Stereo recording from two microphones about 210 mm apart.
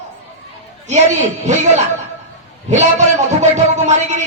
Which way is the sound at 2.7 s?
35° right (ahead or behind).